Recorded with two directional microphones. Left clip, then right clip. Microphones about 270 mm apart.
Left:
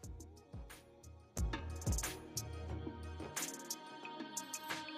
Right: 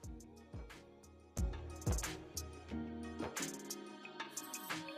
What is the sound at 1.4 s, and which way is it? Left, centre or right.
Music, centre.